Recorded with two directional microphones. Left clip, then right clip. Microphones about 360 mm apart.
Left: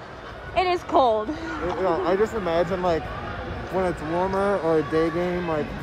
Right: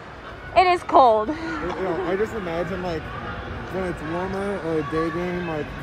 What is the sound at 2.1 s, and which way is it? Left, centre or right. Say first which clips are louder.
Speech: left 3 dB; centre.